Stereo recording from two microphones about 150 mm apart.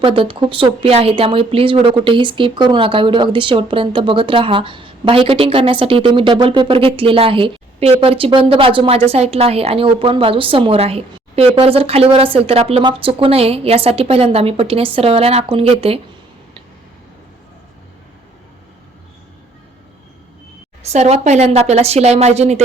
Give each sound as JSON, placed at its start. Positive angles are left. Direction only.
{"t": 0.0, "sound": "speech", "side_deg": -35}
{"t": 20.8, "sound": "speech", "side_deg": -45}